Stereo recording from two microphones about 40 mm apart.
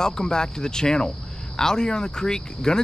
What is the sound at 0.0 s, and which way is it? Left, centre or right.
Speech, centre.